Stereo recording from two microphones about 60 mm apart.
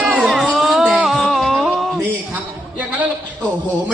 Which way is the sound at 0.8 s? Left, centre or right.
Centre.